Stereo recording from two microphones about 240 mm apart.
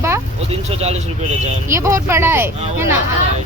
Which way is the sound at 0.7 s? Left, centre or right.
Right.